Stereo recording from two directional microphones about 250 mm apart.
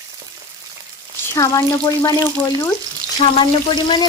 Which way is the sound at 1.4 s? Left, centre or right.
Centre.